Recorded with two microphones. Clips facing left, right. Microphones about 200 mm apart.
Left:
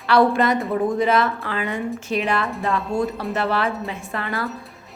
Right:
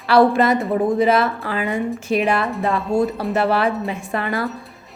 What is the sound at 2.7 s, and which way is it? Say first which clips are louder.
Speech: right 4 dB; 35° right (ahead or behind).